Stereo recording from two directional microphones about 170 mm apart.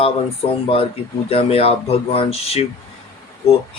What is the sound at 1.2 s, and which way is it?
Speech, 35° left (ahead or behind).